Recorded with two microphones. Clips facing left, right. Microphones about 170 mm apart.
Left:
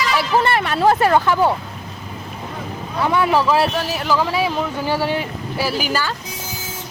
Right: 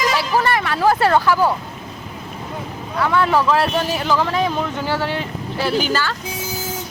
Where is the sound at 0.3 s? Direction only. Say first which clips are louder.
Left 3 dB; 25° left (ahead or behind).